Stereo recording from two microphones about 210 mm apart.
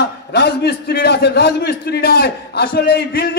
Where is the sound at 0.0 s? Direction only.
50° left (ahead or behind).